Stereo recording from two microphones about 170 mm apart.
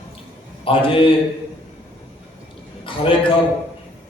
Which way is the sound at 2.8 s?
30° left (ahead or behind).